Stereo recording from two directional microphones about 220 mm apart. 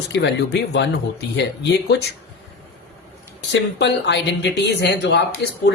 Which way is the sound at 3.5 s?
55° left (ahead or behind).